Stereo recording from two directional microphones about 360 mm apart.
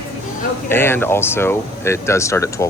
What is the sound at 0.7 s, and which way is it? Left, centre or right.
Speech, centre.